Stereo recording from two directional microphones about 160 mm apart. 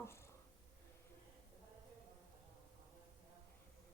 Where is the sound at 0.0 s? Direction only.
15° left (ahead or behind).